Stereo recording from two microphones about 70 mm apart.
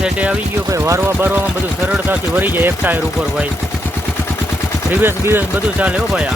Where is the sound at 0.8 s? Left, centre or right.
Right.